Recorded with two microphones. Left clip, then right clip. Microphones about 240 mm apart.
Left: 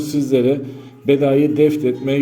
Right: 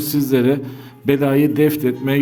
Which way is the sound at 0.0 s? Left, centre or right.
Right.